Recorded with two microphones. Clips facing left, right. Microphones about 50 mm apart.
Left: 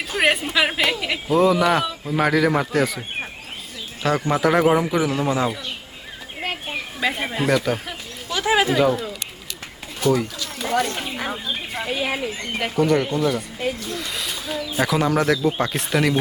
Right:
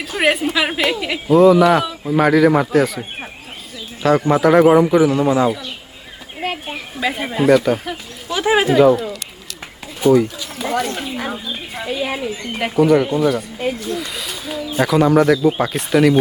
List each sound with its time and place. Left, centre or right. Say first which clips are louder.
0.2 s a woman's voice: right 2 dB; centre
4.3 s a woman's voice: right 6 dB; centre
6.4 s a sound: right 3 dB; centre
8.3 s speech: right 4 dB; centre
8.7 s a woman's voice: right 7 dB; centre
12.5 s a woman's voice: right 5 dB; centre